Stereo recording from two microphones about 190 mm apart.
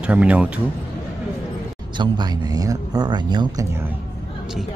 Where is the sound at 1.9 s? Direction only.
25° right (ahead or behind).